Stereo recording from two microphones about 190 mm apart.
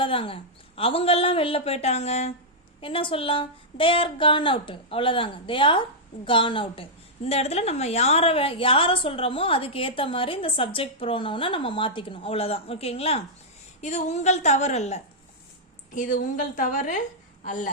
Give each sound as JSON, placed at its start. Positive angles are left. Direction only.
{"t": 0.0, "sound": "a woman's voice", "side_deg": 30}